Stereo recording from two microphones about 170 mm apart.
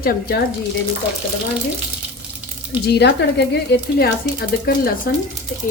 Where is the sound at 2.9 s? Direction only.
80° left; by 5.1 s 60° left (ahead or behind).